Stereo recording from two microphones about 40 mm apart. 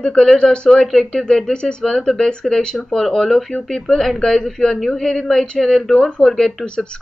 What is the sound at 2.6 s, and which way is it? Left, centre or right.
Speech, left.